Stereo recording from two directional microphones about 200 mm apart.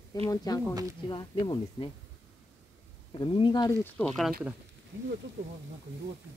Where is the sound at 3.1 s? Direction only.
25° left (ahead or behind).